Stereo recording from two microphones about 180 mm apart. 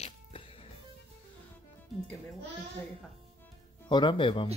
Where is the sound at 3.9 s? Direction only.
25° left (ahead or behind).